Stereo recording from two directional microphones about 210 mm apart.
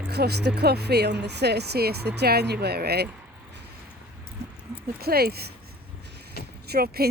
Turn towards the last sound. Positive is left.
turn(degrees=-50)  # may be behind; listen again after turning